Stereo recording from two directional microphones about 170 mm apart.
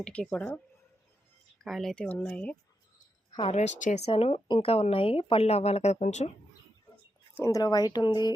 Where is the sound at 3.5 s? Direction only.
40° left (ahead or behind).